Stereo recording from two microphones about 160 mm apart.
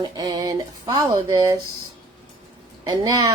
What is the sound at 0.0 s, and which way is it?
Speech, 25° right (ahead or behind).